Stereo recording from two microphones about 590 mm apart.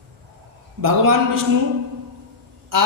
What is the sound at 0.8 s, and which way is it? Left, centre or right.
Speech, right.